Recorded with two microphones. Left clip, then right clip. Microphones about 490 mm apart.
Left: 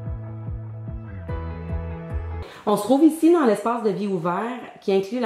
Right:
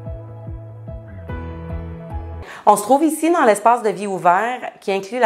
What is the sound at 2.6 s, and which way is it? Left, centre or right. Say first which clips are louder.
A woman's voice: right 5 dB; right.